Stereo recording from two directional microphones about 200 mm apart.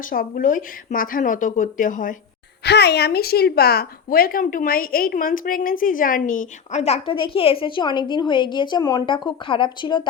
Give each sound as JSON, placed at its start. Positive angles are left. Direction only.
{"t": 0.1, "sound": "speech", "side_deg": 45}
{"t": 2.6, "sound": "speech", "side_deg": 55}